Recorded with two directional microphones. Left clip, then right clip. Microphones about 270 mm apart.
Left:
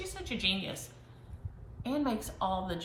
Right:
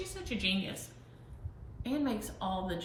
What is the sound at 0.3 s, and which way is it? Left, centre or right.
Speech, centre.